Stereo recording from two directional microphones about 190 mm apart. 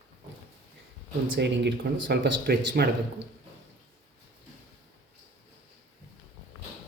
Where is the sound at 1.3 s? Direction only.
70° right (ahead or behind).